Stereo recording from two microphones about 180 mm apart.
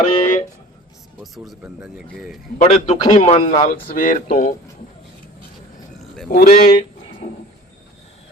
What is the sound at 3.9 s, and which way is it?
Speech, 50° left (ahead or behind).